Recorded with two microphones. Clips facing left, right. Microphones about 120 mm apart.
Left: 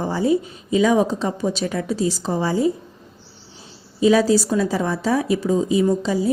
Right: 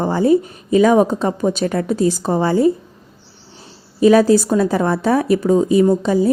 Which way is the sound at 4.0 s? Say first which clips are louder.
Right 4 dB; 55° right (ahead or behind).